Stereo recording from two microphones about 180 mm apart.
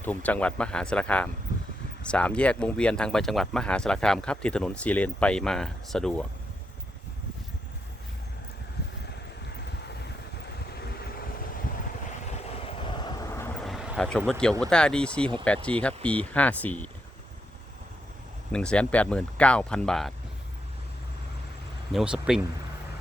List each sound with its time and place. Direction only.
0.0 s speech: 10° left (ahead or behind)
10.8 s vehicle: 60° left (ahead or behind)
12.6 s vehicle: 30° left (ahead or behind)
13.7 s a sound: centre (ahead or behind)
14.6 s speech: 5° left (ahead or behind)
18.5 s speech: 5° left (ahead or behind)
21.9 s speech: 5° right (ahead or behind)